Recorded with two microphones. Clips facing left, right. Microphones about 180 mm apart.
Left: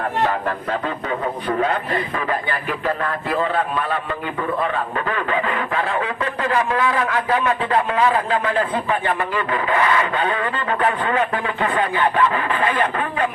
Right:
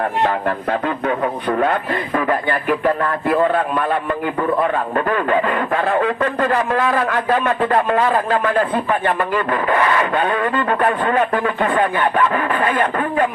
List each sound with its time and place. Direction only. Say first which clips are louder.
0.7 s music: right 7 dB; 60° right (ahead or behind)
2.1 s speech: right 5 dB; 50° right (ahead or behind)